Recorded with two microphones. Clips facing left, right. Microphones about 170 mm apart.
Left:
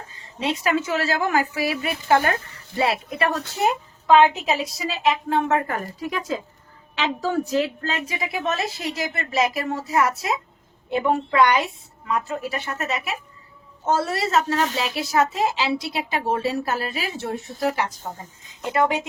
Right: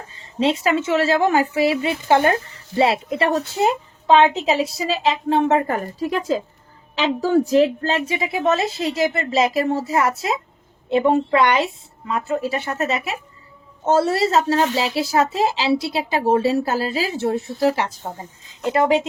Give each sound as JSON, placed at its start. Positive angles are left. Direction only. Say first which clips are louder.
{"t": 0.1, "sound": "a woman's voice", "louder": "right 7 dB", "side_deg": -25}